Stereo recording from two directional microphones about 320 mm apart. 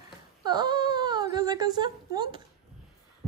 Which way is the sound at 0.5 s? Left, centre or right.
Centre.